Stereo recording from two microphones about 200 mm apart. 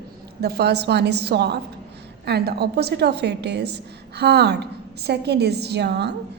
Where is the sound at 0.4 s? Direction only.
55° right (ahead or behind).